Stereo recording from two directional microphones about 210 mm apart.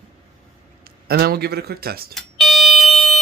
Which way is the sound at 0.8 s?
45° right (ahead or behind).